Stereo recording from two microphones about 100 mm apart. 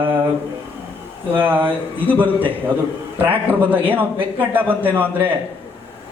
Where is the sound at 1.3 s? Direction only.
20° right (ahead or behind).